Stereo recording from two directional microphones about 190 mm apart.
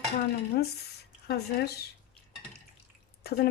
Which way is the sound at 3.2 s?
55° left (ahead or behind).